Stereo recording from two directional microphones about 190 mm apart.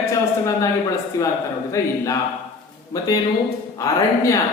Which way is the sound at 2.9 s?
20° left (ahead or behind).